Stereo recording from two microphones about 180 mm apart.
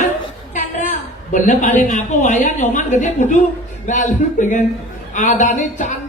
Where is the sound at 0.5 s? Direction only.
45° left (ahead or behind).